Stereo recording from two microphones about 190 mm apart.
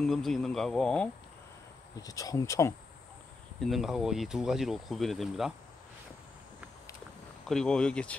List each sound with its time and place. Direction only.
0.0 s speech: centre (ahead or behind)
2.0 s speech: 20° left (ahead or behind)
3.6 s speech: centre (ahead or behind)
7.4 s speech: centre (ahead or behind)